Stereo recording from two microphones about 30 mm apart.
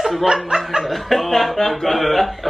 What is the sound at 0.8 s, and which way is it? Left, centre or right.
Speech, centre.